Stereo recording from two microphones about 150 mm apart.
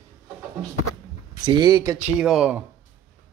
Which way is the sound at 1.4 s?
25° right (ahead or behind).